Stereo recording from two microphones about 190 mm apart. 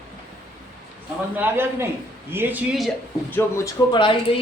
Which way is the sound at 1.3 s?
10° right (ahead or behind).